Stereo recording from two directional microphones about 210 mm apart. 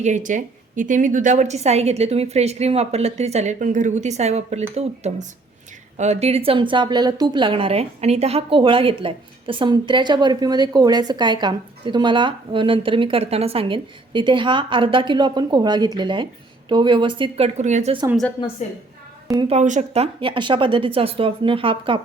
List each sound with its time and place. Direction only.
0.0 s a woman's voice: 35° right (ahead or behind)
19.4 s a woman's voice: 30° right (ahead or behind)